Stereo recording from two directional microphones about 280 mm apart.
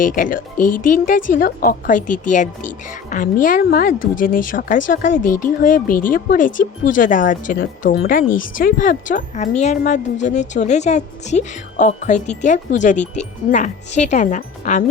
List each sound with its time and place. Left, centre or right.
0.0 s speech: left
3.1 s a woman's voice: left
5.2 s speech: left
5.5 s speech: left